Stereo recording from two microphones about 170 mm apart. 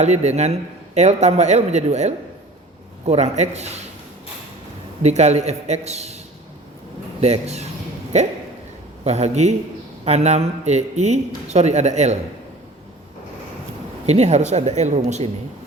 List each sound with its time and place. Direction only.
0.0 s a man's voice: 40° right (ahead or behind)
5.0 s a man's voice: 40° right (ahead or behind)
7.2 s a man's voice: 40° right (ahead or behind)
14.1 s a man's voice: 40° right (ahead or behind)